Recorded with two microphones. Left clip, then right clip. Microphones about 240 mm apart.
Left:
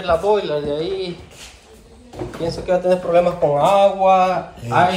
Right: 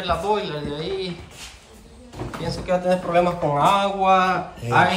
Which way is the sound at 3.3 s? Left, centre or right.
Right.